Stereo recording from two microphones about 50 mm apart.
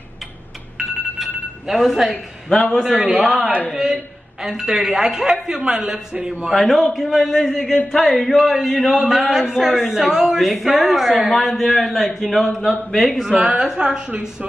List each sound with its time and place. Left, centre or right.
0.7 s a sound: centre
3.1 s a man's voice: centre
6.5 s a man's voice: centre
13.3 s a woman's voice: centre